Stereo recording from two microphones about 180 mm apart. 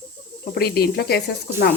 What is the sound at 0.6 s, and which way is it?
Speech, 60° left (ahead or behind).